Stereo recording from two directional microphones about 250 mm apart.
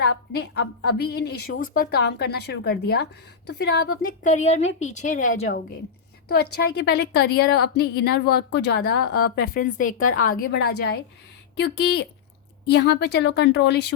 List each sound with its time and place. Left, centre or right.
0.3 s a woman's voice: left